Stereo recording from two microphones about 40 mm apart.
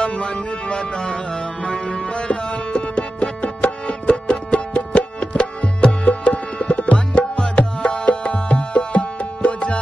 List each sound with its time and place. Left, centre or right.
0.0 s music: left
6.0 s tabla: left
7.1 s music: left